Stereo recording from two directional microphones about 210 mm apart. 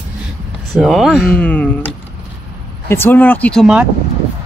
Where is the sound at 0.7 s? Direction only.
Centre (ahead or behind).